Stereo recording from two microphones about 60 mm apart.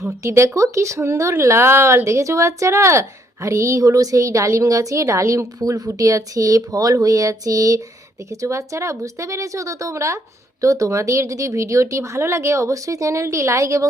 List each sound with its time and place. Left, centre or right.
0.0 s a woman's voice: right
8.4 s a woman's voice: right